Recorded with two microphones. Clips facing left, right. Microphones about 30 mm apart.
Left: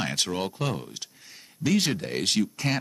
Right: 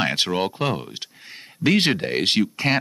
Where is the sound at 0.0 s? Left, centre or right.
Right.